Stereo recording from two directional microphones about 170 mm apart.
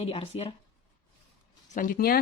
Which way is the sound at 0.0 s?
35° left (ahead or behind).